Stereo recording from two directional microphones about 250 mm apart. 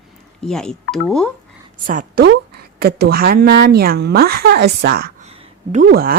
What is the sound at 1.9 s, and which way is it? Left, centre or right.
A woman's voice, right.